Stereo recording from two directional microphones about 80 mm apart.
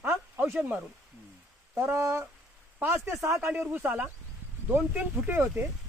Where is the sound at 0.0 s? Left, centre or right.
Right.